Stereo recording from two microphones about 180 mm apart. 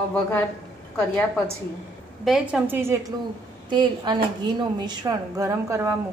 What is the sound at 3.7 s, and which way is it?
A woman's voice, 25° right (ahead or behind).